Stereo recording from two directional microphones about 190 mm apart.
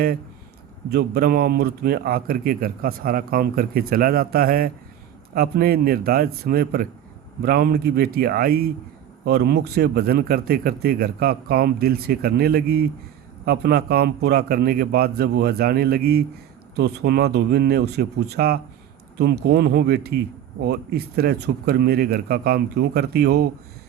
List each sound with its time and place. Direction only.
0.9 s speech: 55° right (ahead or behind)